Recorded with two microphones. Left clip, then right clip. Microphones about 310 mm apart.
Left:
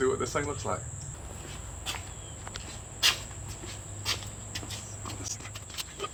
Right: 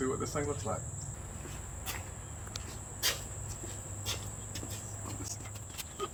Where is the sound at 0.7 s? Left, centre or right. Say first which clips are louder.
Left 4 dB; centre.